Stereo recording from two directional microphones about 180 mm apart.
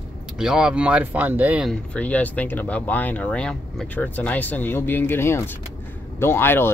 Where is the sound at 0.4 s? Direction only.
5° right (ahead or behind).